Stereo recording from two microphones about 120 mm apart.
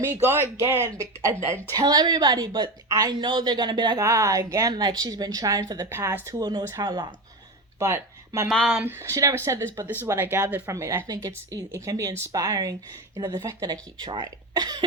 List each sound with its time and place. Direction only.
0.0 s speech: 20° right (ahead or behind)
1.7 s a woman's voice: 35° right (ahead or behind)
4.0 s a woman's voice: 25° right (ahead or behind)
5.8 s speech: 20° right (ahead or behind)
6.4 s a woman's voice: 40° right (ahead or behind)
7.8 s speech: 25° right (ahead or behind)
8.4 s speech: 5° left (ahead or behind)
8.7 s a woman's voice: 15° right (ahead or behind); by 14.8 s 35° right (ahead or behind)